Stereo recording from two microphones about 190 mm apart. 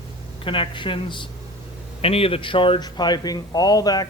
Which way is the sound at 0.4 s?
25° left (ahead or behind).